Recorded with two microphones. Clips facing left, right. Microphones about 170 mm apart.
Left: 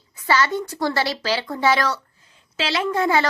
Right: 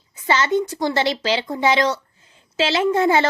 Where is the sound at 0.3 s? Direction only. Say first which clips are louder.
Right 2 dB; 20° right (ahead or behind).